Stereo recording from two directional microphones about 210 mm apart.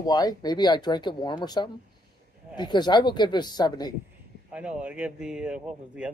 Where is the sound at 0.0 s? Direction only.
20° left (ahead or behind).